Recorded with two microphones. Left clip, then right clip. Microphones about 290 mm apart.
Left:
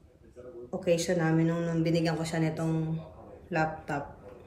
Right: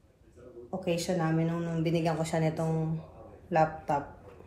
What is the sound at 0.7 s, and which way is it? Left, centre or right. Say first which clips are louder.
Speech: left 4 dB; centre.